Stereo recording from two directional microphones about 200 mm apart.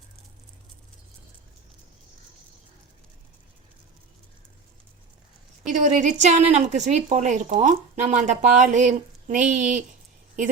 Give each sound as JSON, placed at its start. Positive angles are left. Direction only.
{"t": 5.7, "sound": "a woman's voice", "side_deg": -40}